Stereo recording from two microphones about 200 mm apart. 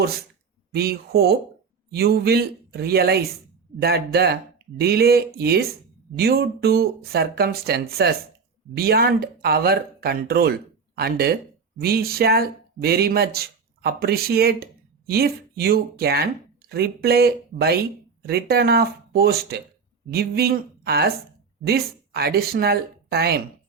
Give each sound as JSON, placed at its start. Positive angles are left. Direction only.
{"t": 0.7, "sound": "speech", "side_deg": -50}